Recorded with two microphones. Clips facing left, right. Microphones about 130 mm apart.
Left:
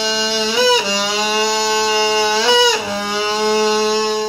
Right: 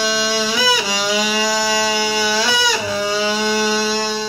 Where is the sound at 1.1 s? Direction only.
25° left (ahead or behind).